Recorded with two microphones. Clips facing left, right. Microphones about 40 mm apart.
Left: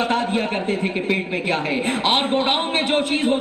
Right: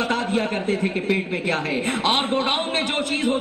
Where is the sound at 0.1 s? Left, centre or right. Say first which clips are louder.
Left 2 dB; left.